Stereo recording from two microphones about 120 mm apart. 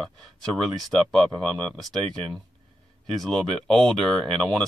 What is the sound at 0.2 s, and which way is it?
Speech, 5° left (ahead or behind).